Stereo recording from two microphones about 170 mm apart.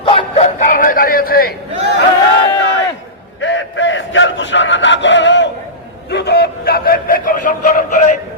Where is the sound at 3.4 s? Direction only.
90° left.